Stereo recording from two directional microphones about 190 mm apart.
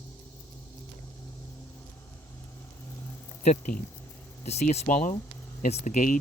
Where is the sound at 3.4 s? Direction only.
35° left (ahead or behind).